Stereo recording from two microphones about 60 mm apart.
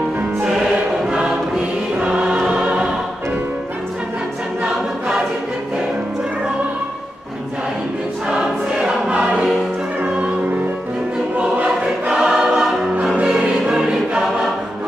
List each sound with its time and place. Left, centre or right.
2.0 s choir: centre
10.0 s music: centre
12.1 s choir: centre